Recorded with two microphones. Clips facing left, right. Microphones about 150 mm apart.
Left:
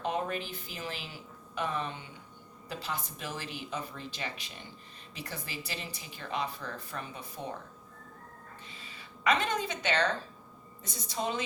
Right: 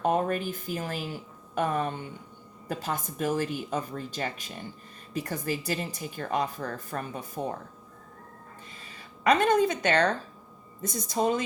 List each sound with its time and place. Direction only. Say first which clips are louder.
0.0 s speech: right 7 dB; 50° right (ahead or behind)
8.8 s speech: right 5 dB; 45° right (ahead or behind)